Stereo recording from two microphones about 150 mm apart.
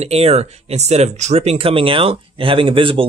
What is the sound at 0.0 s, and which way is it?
Speech, 45° right (ahead or behind).